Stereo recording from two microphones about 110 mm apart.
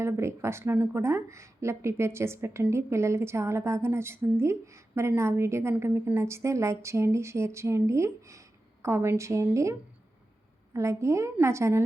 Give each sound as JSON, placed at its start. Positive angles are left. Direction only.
{"t": 0.0, "sound": "speech", "side_deg": -25}
{"t": 10.8, "sound": "speech", "side_deg": -25}